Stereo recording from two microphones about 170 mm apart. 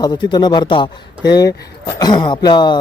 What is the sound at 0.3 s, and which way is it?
A man's voice, 25° left (ahead or behind).